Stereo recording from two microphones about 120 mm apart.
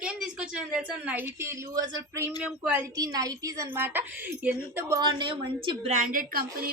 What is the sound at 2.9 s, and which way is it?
A woman's voice, 30° right (ahead or behind).